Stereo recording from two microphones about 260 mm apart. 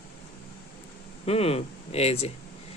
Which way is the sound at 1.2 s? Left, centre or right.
Left.